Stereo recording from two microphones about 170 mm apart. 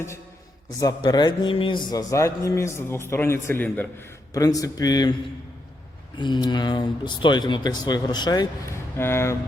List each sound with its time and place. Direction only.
0.8 s a man's voice: 25° left (ahead or behind)
6.1 s speech: 25° left (ahead or behind)
9.0 s a man's voice: 15° left (ahead or behind)